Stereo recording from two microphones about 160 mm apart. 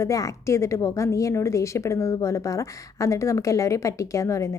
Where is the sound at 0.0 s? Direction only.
20° left (ahead or behind).